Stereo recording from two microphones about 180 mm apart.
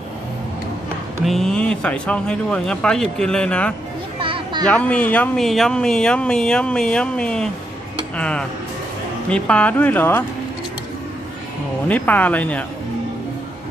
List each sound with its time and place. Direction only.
1.2 s speech: centre (ahead or behind)
4.2 s children playing: 30° right (ahead or behind)
4.7 s speech: 5° left (ahead or behind)
11.9 s speech: 10° left (ahead or behind)